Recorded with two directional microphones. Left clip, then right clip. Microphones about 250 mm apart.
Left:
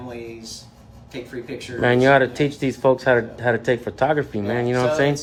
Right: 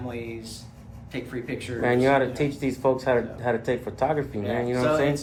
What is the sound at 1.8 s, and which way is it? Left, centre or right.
Speech, left.